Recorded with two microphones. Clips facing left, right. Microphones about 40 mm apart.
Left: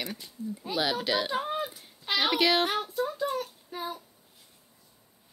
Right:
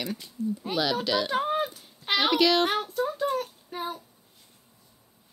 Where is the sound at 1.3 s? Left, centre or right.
Right.